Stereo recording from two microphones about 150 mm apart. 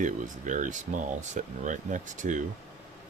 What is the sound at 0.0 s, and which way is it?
Speech, 55° right (ahead or behind).